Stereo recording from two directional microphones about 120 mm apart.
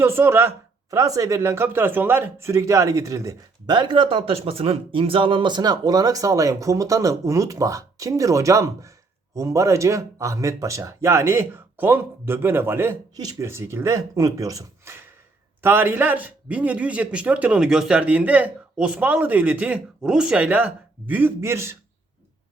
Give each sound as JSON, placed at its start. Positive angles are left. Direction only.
{"t": 0.0, "sound": "speech", "side_deg": -20}
{"t": 3.7, "sound": "a man's voice", "side_deg": -40}